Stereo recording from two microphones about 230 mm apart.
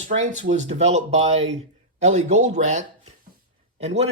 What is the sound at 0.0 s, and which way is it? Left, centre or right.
Speech, right.